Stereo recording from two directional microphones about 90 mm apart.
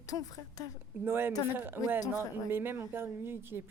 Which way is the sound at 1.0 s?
25° right (ahead or behind).